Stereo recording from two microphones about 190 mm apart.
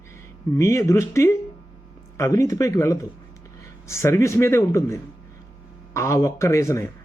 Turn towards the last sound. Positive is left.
turn(degrees=15)  # may be behind; listen again after turning